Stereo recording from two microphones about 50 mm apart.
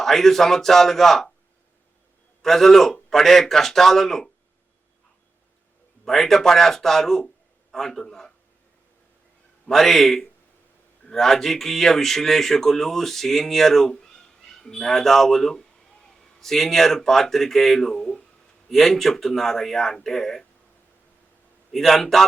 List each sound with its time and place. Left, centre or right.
0.0 s a man's voice: centre
2.4 s speech: centre
6.1 s speech: centre
9.6 s a man's voice: centre
17.9 s speech: left
18.7 s speech: centre
21.7 s a man's voice: centre